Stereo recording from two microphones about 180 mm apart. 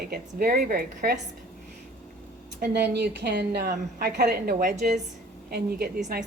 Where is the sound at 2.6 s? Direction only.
65° right (ahead or behind).